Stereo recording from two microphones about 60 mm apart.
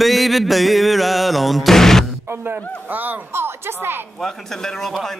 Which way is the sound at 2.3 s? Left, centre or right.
Right.